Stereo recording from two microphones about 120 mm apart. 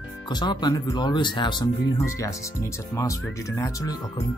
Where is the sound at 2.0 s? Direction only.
25° left (ahead or behind).